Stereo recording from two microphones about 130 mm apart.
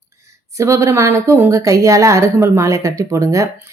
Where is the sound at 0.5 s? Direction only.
25° right (ahead or behind).